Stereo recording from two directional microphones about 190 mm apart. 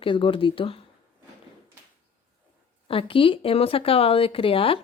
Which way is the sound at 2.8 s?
30° left (ahead or behind).